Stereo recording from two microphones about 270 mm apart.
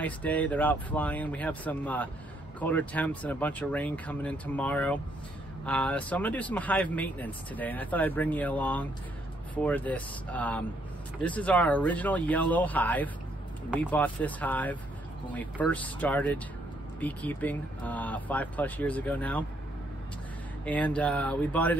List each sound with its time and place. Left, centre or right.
0.0 s speech: centre
20.6 s speech: centre